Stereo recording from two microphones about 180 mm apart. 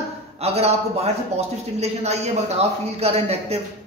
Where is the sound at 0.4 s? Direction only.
35° right (ahead or behind).